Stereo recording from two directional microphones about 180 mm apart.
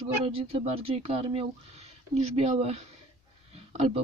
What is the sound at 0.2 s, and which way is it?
Speech, 30° right (ahead or behind).